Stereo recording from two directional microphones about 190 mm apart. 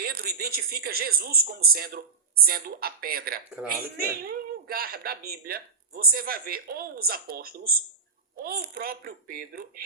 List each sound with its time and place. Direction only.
0.0 s speech: 55° right (ahead or behind)